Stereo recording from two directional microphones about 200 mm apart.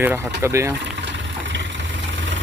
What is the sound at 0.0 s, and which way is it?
Speech, 10° right (ahead or behind).